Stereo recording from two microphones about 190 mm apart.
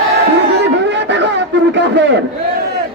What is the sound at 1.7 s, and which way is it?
Speech, 70° right (ahead or behind).